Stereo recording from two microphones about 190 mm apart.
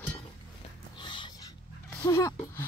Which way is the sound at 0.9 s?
25° left (ahead or behind).